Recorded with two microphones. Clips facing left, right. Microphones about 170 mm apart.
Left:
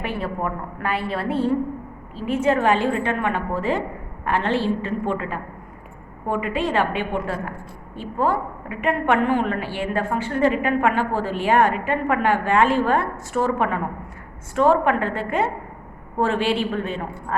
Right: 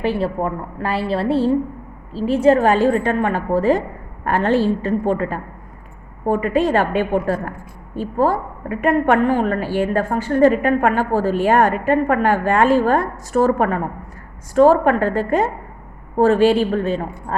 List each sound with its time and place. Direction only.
0.0 s a woman's voice: 30° right (ahead or behind)